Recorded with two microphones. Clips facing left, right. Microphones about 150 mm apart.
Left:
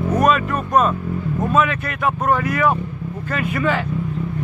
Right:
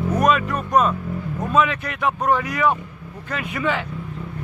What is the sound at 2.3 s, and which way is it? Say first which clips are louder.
Speech: left 2 dB; 15° right (ahead or behind).